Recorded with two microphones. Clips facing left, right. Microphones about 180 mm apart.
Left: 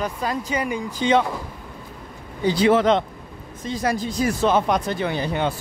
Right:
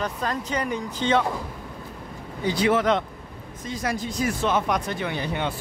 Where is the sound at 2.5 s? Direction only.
30° left (ahead or behind).